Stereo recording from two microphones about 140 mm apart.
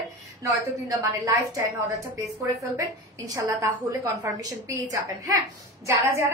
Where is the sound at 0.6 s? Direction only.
25° right (ahead or behind).